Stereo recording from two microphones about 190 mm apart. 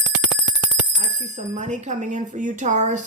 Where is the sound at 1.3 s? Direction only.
40° right (ahead or behind).